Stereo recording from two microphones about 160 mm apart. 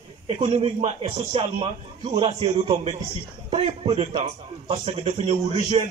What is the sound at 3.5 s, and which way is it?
A man's voice, 35° right (ahead or behind).